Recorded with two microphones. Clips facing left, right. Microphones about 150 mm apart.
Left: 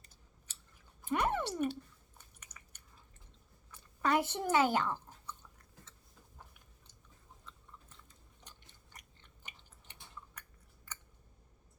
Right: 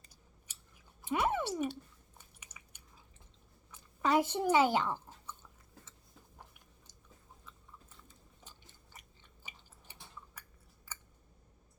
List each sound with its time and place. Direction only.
1.1 s speech: 5° right (ahead or behind)
2.4 s chewing: 10° right (ahead or behind)
3.7 s a sound: 10° right (ahead or behind)
4.3 s chewing: 10° right (ahead or behind)